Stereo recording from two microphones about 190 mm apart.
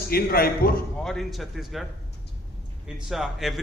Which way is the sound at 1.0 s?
Centre (ahead or behind).